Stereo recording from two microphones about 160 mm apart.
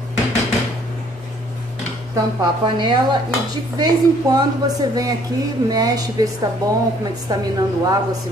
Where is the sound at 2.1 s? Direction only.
30° right (ahead or behind).